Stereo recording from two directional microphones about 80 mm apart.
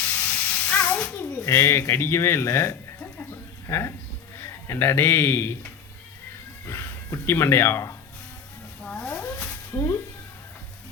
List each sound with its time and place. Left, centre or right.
0.3 s hiss: centre
1.5 s speech: left
3.0 s music: left
3.7 s a man's voice: left
6.7 s speech: left
8.9 s a sound: centre